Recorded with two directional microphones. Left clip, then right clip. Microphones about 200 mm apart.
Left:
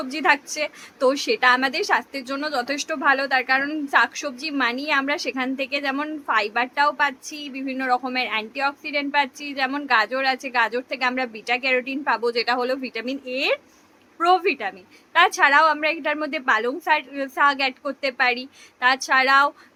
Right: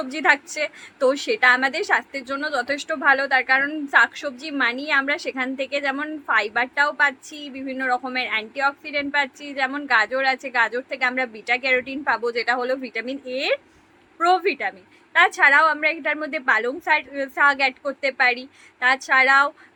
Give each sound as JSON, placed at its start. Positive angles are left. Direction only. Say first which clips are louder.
{"t": 0.0, "sound": "a woman's voice", "louder": "right 1 dB", "side_deg": 15}